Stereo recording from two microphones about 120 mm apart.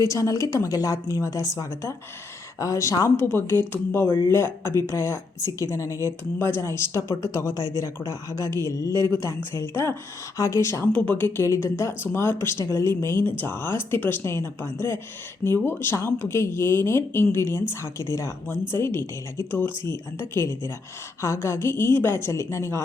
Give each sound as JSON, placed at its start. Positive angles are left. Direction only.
{"t": 0.1, "sound": "speech", "side_deg": 25}
{"t": 7.5, "sound": "speech", "side_deg": -30}
{"t": 7.8, "sound": "speech", "side_deg": 25}